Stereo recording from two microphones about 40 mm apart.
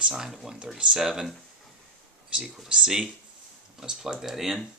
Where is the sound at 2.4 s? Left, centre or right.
Centre.